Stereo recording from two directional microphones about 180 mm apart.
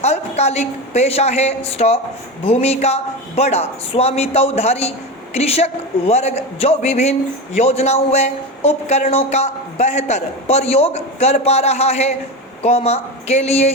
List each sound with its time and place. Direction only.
0.0 s a woman's voice: 35° left (ahead or behind)